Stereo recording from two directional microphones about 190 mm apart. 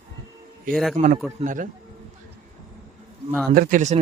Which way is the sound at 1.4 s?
45° right (ahead or behind).